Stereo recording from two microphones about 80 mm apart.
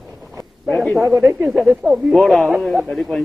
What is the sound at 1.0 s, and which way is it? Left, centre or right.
Speech, right.